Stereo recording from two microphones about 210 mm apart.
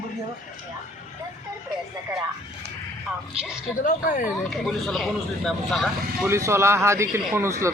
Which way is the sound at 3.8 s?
40° left (ahead or behind).